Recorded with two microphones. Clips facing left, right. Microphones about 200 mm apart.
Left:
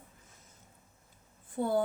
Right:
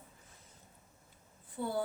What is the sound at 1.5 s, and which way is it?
Speech, 50° left (ahead or behind).